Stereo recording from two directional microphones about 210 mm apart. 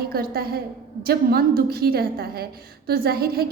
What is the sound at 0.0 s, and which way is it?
A woman's voice, 45° right (ahead or behind).